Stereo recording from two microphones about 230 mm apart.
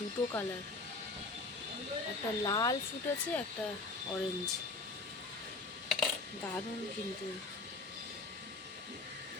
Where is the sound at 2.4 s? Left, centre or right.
Centre.